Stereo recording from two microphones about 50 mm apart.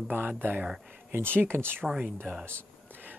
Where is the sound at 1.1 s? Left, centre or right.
Right.